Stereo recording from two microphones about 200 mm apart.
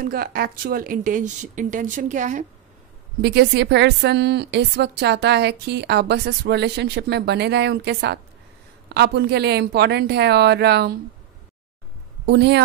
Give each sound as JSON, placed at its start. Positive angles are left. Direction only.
{"t": 0.0, "sound": "speech", "side_deg": -50}
{"t": 3.2, "sound": "a woman's voice", "side_deg": -55}
{"t": 12.3, "sound": "a woman's voice", "side_deg": -55}